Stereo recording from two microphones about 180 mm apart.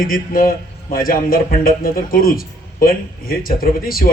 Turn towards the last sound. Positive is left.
turn(degrees=55)  # may be behind; listen again after turning